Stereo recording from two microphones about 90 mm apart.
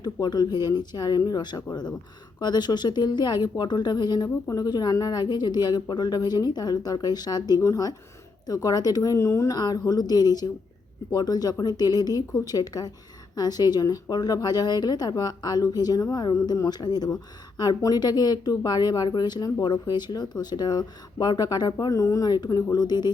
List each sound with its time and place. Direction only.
0.0 s speech: 50° left (ahead or behind)